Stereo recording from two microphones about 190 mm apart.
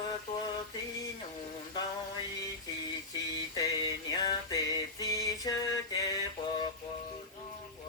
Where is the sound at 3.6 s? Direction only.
20° left (ahead or behind).